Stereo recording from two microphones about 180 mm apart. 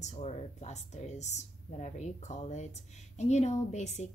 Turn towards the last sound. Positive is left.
turn(degrees=40)  # may be behind; listen again after turning